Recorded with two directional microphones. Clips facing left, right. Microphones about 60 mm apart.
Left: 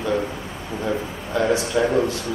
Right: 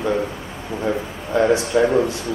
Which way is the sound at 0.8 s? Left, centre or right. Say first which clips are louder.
Right 2 dB; centre.